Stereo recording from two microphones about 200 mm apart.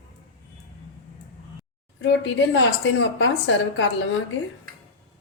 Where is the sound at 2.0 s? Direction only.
65° left (ahead or behind).